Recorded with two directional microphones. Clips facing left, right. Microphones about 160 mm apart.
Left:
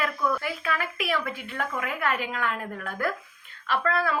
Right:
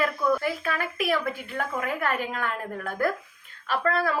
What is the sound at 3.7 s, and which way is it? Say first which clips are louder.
Speech: right 1 dB; 40° right (ahead or behind).